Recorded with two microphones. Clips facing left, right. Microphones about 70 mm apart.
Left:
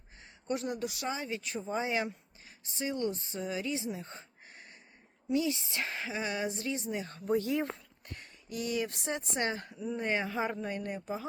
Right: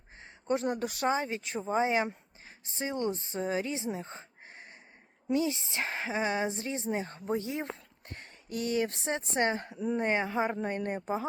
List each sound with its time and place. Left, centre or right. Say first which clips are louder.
0.2 s speech: right 4 dB; right
8.0 s a sound: right 1 dB; right
9.0 s speech: right 4 dB; right
9.7 s speech: right 5 dB; right
10.0 s speech: right 2 dB; right
10.7 s speech: right 4 dB; right